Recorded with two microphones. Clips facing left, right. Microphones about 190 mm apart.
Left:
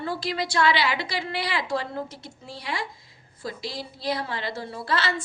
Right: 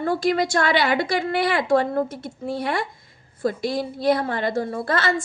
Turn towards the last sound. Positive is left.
turn(degrees=-50)  # may be behind; listen again after turning